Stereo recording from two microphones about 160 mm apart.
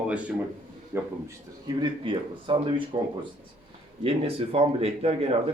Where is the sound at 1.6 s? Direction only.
30° right (ahead or behind).